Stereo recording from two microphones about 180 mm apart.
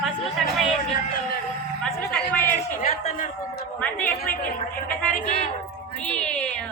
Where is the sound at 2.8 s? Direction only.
40° left (ahead or behind).